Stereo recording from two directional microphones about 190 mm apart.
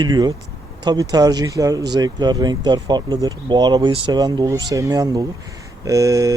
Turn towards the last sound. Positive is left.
turn(degrees=-15)  # may be behind; listen again after turning